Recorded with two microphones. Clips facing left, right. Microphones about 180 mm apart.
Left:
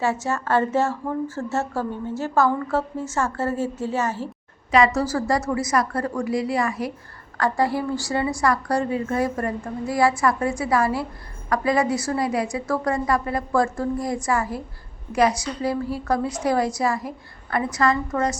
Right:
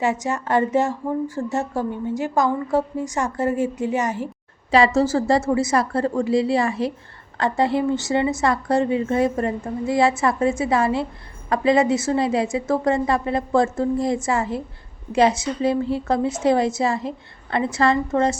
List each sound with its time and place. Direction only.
0.0 s a woman's voice: 15° right (ahead or behind)
4.7 s a woman's voice: 30° right (ahead or behind)